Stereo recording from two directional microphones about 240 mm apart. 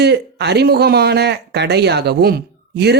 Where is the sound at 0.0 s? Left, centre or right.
Right.